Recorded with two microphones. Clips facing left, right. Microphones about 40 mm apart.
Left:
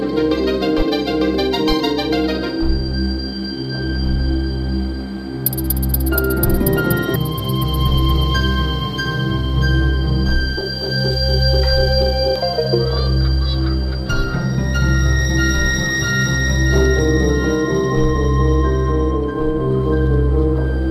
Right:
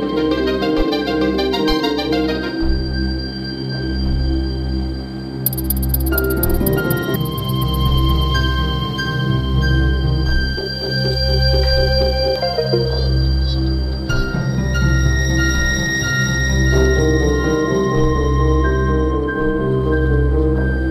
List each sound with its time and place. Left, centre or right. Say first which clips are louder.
0.0 s music: even; centre
6.1 s music: left 1 dB; centre
19.3 s music: right 1 dB; centre